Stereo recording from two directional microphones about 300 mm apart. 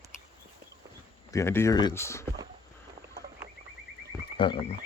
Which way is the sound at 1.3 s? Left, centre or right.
Centre.